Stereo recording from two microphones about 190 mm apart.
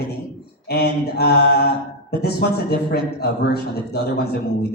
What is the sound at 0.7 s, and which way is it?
Mantra, 55° left (ahead or behind).